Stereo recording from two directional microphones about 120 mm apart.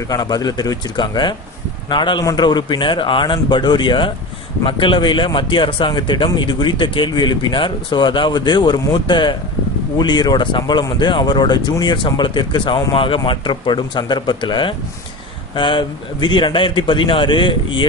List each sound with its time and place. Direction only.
0.1 s a man's voice: 35° left (ahead or behind)